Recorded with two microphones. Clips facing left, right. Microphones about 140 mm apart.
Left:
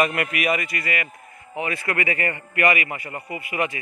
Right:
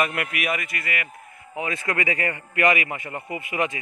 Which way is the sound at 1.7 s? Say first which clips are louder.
Even; 15° right (ahead or behind).